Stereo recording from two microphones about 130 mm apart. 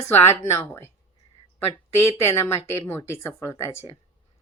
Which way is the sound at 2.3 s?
20° left (ahead or behind).